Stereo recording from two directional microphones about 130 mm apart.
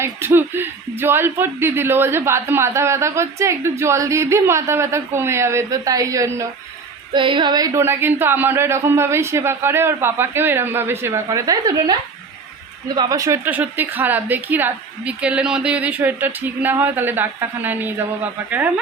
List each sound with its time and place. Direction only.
0.0 s speech: 20° right (ahead or behind)
7.1 s speech: 40° right (ahead or behind)
7.8 s speech: 15° right (ahead or behind)
13.4 s a woman's voice: 15° right (ahead or behind)